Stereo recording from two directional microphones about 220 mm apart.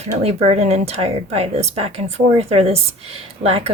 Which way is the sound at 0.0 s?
30° right (ahead or behind).